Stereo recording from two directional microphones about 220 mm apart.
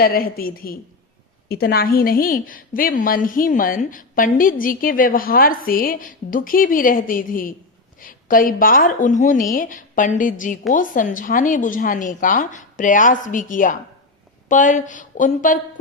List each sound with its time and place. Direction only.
0.0 s a woman's voice: 40° left (ahead or behind)